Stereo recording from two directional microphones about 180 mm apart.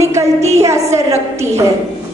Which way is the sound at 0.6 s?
15° right (ahead or behind).